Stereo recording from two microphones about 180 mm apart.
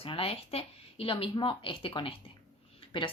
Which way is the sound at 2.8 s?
25° left (ahead or behind).